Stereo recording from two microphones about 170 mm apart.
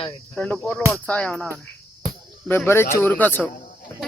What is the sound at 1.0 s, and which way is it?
Music, 5° left (ahead or behind).